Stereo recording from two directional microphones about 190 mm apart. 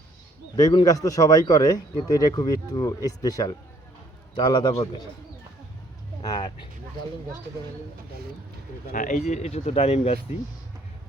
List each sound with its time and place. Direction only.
0.5 s speech: 20° left (ahead or behind)
6.2 s speech: 25° left (ahead or behind)
8.9 s speech: 45° left (ahead or behind)